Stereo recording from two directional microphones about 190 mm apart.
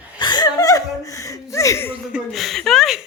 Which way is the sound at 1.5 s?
15° left (ahead or behind).